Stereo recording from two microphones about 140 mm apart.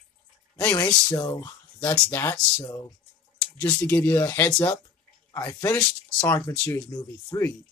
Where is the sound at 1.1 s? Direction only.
30° left (ahead or behind).